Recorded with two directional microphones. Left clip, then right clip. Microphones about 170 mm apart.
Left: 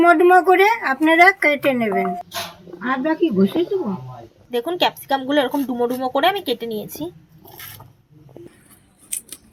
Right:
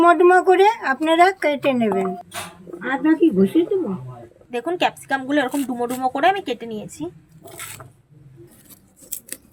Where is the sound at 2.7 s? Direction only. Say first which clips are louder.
Right 1 dB; 75° right (ahead or behind).